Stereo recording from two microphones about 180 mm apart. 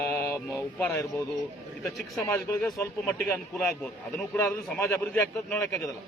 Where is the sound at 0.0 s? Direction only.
10° left (ahead or behind).